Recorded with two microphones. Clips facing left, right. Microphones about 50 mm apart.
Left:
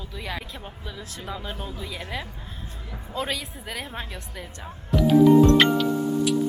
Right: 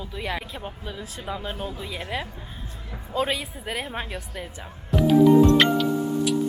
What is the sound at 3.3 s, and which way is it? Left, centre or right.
Speech, centre.